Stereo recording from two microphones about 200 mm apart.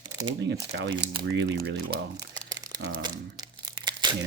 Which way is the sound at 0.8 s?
65° right (ahead or behind).